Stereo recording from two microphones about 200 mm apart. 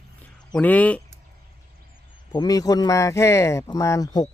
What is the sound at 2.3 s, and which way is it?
Speech, 20° left (ahead or behind).